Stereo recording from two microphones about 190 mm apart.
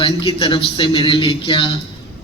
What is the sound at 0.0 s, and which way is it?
A man's voice, 30° left (ahead or behind).